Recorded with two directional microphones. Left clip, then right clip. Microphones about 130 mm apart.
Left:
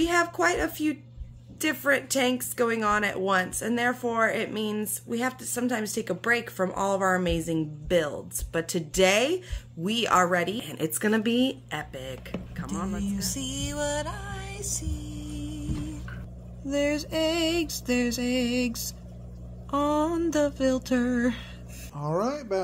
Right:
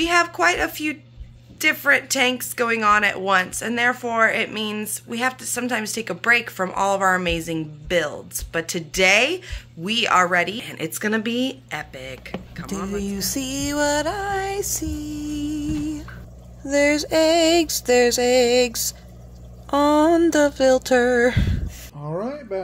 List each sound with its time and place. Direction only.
0.0 s a woman's voice: 30° left (ahead or behind)
12.7 s speech: 20° left (ahead or behind)
13.0 s music: 65° right (ahead or behind)
16.6 s music: 90° right
22.0 s speech: 20° left (ahead or behind)